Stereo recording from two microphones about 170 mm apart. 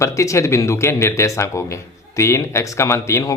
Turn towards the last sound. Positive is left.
turn(degrees=15)  # may be behind; listen again after turning